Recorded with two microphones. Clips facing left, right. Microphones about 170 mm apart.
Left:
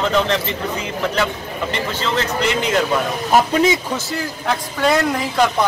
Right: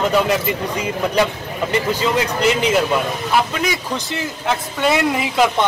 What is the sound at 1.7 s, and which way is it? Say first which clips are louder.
Speech: right 5 dB; 10° right (ahead or behind).